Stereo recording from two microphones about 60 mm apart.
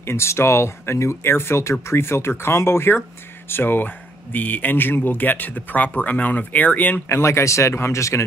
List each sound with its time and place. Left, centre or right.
0.0 s speech: left
7.1 s speech: left